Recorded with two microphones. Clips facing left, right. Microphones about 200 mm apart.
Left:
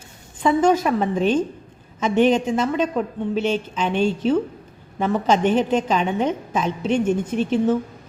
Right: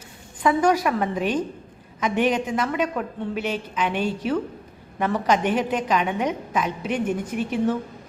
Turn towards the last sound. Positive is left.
turn(degrees=30)  # may be behind; listen again after turning